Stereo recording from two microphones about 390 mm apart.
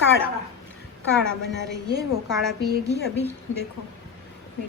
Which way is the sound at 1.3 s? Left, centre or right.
Right.